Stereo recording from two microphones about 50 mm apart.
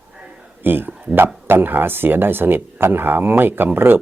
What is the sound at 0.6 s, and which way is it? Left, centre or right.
Speech, right.